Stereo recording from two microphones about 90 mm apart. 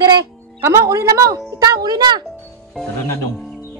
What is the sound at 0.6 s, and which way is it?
A woman's voice, 30° right (ahead or behind).